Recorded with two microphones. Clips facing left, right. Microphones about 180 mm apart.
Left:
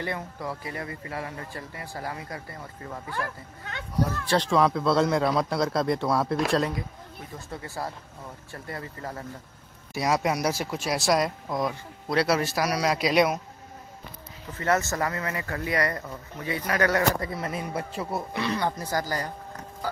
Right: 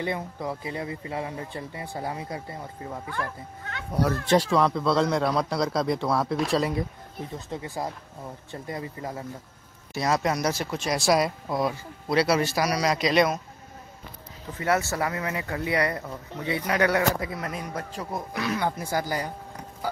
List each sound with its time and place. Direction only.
0.0 s speech: 20° right (ahead or behind)
3.9 s speech: 60° right (ahead or behind)
4.4 s speech: centre (ahead or behind)
7.3 s speech: 20° right (ahead or behind)
9.9 s speech: 10° left (ahead or behind)
14.6 s speech: 10° right (ahead or behind)